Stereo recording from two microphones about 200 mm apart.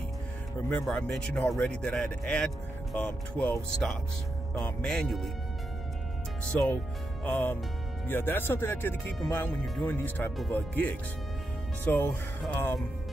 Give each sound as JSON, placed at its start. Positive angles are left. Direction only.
{"t": 0.7, "sound": "speech", "side_deg": 5}
{"t": 6.4, "sound": "speech", "side_deg": 5}